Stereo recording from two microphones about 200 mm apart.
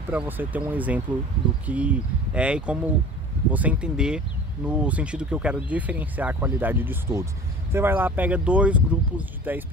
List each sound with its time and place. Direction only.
0.1 s speech: 10° right (ahead or behind)